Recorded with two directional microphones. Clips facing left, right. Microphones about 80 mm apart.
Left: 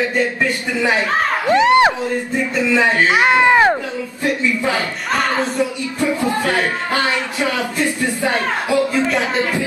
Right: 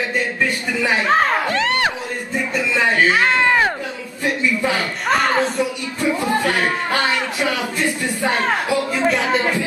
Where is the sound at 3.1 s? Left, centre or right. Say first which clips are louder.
Left 3 dB; centre.